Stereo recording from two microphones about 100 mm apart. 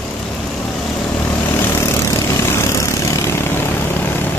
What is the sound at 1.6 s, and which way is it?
Vehicle, 25° left (ahead or behind).